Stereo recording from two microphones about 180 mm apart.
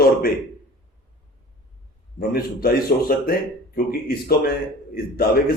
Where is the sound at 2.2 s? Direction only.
55° left (ahead or behind).